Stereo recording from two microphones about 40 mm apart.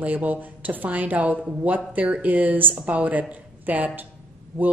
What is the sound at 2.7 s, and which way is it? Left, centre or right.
Speech, right.